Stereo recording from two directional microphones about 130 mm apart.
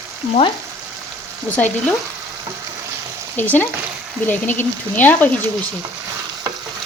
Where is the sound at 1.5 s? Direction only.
10° left (ahead or behind).